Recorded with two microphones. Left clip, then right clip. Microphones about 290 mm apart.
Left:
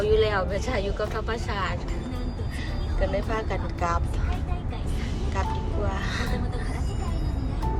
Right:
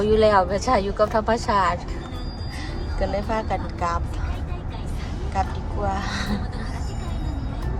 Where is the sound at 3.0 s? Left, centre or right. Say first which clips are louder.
Right 3 dB; centre.